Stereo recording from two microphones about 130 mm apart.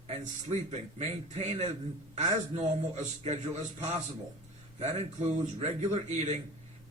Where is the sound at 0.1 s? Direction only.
60° right (ahead or behind).